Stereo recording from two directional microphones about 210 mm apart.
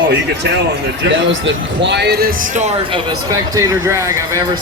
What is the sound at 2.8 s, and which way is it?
Speech, 20° right (ahead or behind).